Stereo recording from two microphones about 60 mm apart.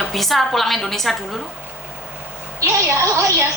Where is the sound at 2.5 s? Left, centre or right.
Right.